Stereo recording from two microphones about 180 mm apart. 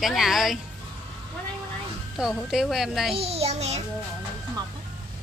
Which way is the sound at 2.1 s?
Centre (ahead or behind).